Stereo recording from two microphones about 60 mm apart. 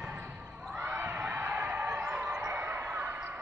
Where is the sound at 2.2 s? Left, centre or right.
Centre.